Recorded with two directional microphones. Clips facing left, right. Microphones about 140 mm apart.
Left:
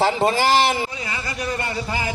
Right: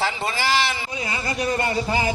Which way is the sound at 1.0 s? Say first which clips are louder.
Right 3 dB; 20° right (ahead or behind).